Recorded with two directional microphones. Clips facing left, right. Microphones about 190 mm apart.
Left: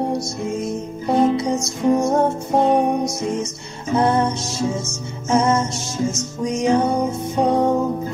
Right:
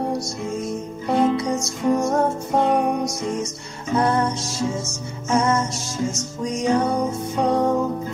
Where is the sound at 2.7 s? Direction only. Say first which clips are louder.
Left 3 dB; 25° left (ahead or behind).